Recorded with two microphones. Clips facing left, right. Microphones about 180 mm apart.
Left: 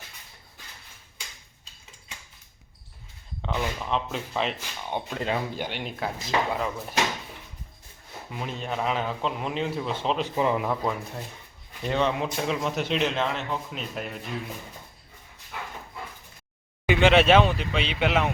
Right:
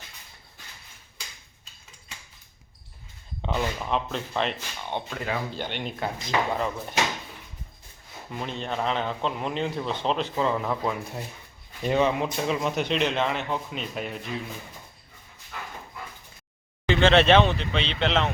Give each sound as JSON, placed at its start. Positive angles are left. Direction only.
{"t": 3.4, "sound": "speech", "side_deg": -15}
{"t": 3.8, "sound": "a man's voice", "side_deg": 0}
{"t": 5.1, "sound": "speech", "side_deg": 25}
{"t": 5.5, "sound": "a man's voice", "side_deg": 5}
{"t": 8.3, "sound": "a man's voice", "side_deg": 5}
{"t": 10.2, "sound": "speech", "side_deg": 15}
{"t": 10.7, "sound": "a man's voice", "side_deg": 0}
{"t": 11.8, "sound": "speech", "side_deg": -15}
{"t": 12.0, "sound": "a man's voice", "side_deg": 0}
{"t": 15.5, "sound": "dog", "side_deg": 15}
{"t": 16.8, "sound": "speech", "side_deg": 10}